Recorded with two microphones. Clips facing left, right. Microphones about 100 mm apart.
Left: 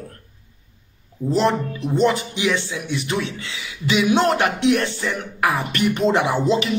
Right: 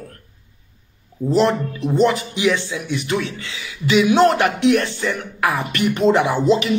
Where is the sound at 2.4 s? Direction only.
40° right (ahead or behind).